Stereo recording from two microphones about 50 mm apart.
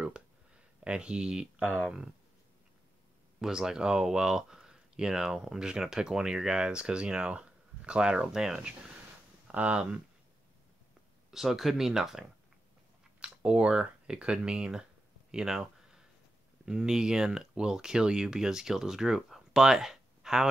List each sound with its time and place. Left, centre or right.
0.8 s speech: right
3.3 s speech: centre
9.5 s speech: right
11.2 s speech: centre
15.3 s a sound: centre
16.6 s speech: centre